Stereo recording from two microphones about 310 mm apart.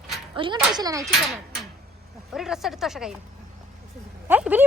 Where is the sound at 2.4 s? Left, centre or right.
Centre.